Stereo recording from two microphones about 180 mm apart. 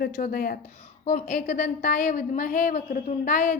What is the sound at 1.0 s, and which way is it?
A woman's voice, 40° left (ahead or behind).